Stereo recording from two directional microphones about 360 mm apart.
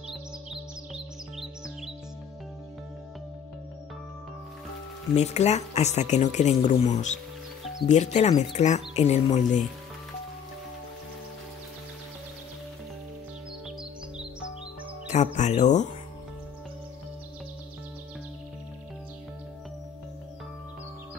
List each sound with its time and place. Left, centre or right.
0.1 s music: centre
5.1 s speech: centre
15.1 s speech: centre